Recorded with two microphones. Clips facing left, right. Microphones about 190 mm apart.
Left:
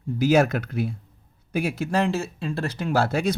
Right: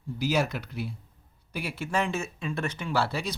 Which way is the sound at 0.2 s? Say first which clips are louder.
Left 8 dB; 50° left (ahead or behind).